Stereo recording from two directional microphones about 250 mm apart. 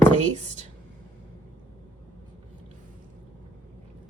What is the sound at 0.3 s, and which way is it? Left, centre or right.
Speech, right.